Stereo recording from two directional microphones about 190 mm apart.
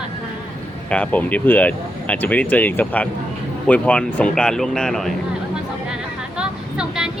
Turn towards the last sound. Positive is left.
turn(degrees=-5)  # may be behind; listen again after turning